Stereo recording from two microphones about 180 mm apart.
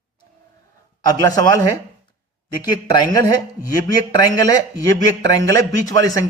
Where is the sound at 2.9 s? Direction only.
20° left (ahead or behind).